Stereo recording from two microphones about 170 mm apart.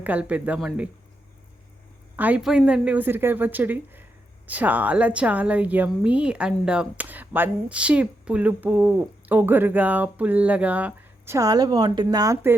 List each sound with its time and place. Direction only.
0.0 s a woman's voice: 10° right (ahead or behind)
2.1 s a woman's voice: 10° right (ahead or behind)
11.3 s speech: 20° right (ahead or behind)